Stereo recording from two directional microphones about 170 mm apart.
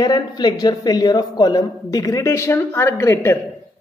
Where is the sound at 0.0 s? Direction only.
25° left (ahead or behind).